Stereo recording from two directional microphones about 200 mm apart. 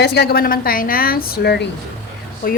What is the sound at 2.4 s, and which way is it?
Speech, 45° left (ahead or behind).